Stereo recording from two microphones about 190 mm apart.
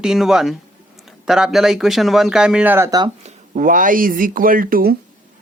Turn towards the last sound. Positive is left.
turn(degrees=-50)  # may be behind; listen again after turning